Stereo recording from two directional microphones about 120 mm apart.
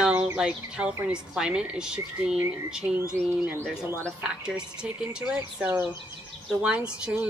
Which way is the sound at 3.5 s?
20° right (ahead or behind).